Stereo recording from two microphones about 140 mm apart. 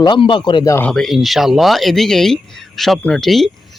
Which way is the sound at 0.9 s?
Centre (ahead or behind).